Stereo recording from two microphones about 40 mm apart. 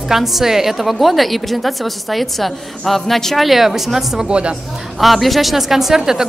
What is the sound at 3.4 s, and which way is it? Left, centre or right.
Speech, centre.